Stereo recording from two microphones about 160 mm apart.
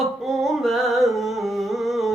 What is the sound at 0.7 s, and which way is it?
Music, centre (ahead or behind).